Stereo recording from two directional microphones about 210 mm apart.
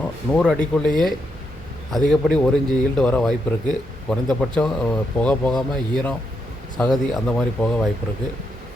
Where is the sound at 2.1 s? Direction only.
5° left (ahead or behind).